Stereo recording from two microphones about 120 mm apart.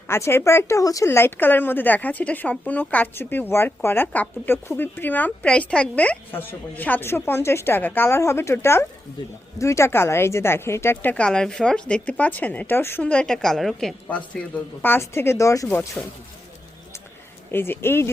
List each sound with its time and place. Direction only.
0.1 s speech: 20° left (ahead or behind)
17.5 s speech: 20° left (ahead or behind)